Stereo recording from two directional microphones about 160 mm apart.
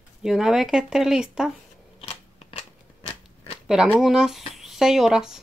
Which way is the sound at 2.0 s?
35° left (ahead or behind).